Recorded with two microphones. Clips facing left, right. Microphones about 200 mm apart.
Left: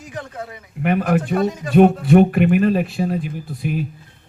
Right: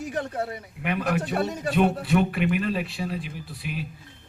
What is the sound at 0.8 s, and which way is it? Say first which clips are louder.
Speech: left 8 dB; 45° left (ahead or behind).